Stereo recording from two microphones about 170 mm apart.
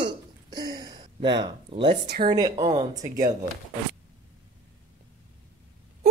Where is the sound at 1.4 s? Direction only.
30° right (ahead or behind).